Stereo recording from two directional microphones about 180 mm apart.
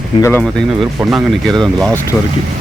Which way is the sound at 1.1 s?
Centre (ahead or behind).